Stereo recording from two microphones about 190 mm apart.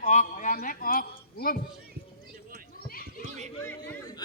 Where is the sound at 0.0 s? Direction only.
40° left (ahead or behind).